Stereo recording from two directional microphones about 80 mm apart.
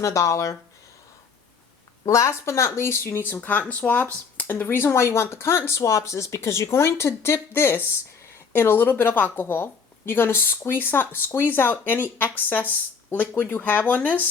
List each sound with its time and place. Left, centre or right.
0.0 s speech: left
2.0 s speech: left
3.3 s speech: left